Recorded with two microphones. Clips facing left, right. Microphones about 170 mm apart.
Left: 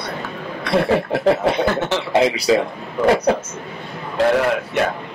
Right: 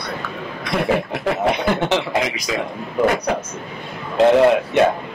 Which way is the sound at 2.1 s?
30° left (ahead or behind).